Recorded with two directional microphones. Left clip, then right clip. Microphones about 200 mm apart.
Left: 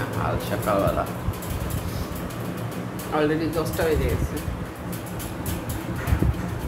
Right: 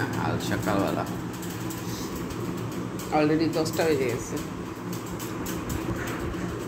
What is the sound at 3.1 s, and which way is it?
Speech, 15° right (ahead or behind).